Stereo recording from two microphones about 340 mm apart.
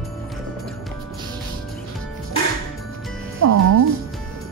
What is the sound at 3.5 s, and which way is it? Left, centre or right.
Music, right.